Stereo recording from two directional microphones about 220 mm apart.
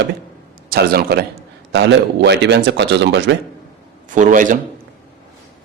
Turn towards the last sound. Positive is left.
turn(degrees=-35)  # may be behind; listen again after turning